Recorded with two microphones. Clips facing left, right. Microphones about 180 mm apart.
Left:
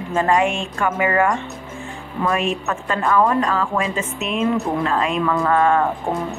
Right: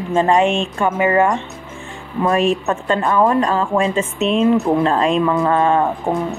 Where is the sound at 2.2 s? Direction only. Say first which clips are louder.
Right 5 dB; 35° right (ahead or behind).